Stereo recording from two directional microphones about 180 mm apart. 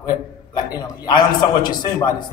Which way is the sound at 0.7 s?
25° left (ahead or behind).